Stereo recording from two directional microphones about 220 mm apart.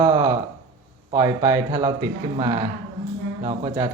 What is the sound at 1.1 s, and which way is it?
Speech, 15° right (ahead or behind).